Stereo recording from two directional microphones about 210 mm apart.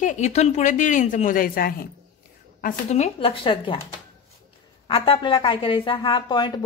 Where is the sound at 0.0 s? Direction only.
35° left (ahead or behind).